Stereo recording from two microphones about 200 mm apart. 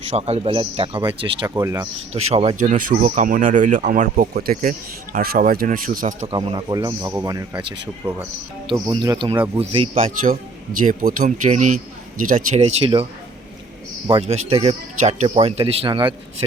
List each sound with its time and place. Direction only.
0.1 s speech: 30° right (ahead or behind)
1.5 s speech: 15° right (ahead or behind)
2.1 s speech: 30° right (ahead or behind)
6.3 s speech: 25° right (ahead or behind)
10.2 s speech: 45° right (ahead or behind); by 13.1 s 25° right (ahead or behind)
14.1 s speech: 30° right (ahead or behind)